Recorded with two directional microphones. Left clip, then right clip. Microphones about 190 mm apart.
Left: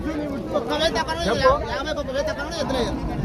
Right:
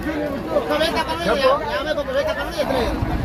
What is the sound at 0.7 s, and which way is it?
Speech, 10° left (ahead or behind).